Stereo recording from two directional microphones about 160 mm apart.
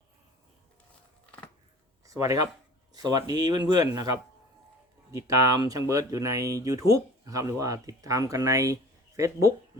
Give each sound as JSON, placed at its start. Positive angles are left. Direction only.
{"t": 2.0, "sound": "speech", "side_deg": -20}
{"t": 5.1, "sound": "speech", "side_deg": -20}